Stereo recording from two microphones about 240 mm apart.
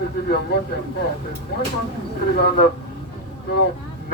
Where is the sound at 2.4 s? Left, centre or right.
Left.